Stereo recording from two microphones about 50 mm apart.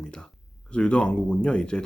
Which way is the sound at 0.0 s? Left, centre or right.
Centre.